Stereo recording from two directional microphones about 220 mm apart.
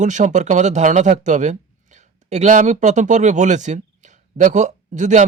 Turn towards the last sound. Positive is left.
turn(degrees=-35)  # may be behind; listen again after turning